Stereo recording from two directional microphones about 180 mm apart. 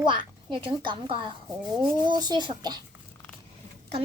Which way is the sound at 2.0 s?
20° right (ahead or behind).